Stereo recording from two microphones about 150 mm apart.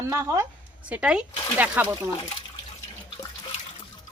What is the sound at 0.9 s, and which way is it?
Speech, 5° right (ahead or behind).